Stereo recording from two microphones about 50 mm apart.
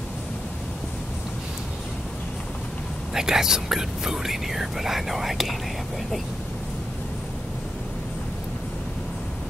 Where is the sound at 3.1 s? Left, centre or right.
Centre.